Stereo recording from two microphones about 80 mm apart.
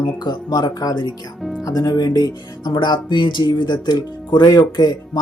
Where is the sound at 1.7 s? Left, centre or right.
Left.